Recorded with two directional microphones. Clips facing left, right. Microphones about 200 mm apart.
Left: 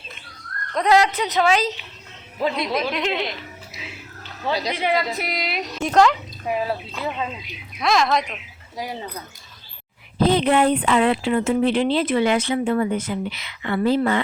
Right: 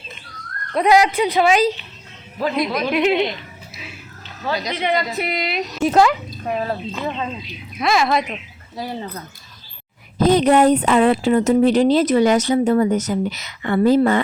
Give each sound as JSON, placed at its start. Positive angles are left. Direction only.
{"t": 0.7, "sound": "a woman's voice", "side_deg": -10}
{"t": 2.9, "sound": "a woman's voice", "side_deg": -10}
{"t": 4.4, "sound": "speech", "side_deg": 30}
{"t": 4.7, "sound": "a woman's voice", "side_deg": 5}
{"t": 6.4, "sound": "speech", "side_deg": 10}
{"t": 7.8, "sound": "a woman's voice", "side_deg": -5}
{"t": 8.7, "sound": "speech", "side_deg": 15}
{"t": 10.2, "sound": "speech", "side_deg": -45}